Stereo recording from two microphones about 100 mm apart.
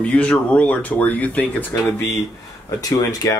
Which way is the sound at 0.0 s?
10° left (ahead or behind).